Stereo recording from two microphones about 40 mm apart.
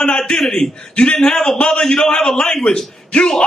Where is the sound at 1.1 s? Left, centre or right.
Centre.